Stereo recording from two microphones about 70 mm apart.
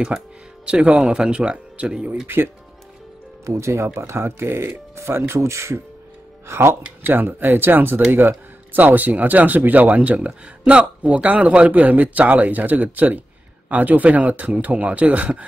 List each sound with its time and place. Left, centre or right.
0.1 s speech: centre
2.2 s speech: right
3.4 s speech: right